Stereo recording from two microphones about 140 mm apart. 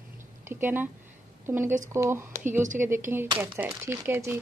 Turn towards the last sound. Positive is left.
turn(degrees=-15)  # may be behind; listen again after turning